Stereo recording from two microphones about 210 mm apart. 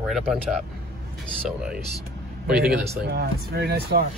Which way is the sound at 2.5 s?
50° right (ahead or behind).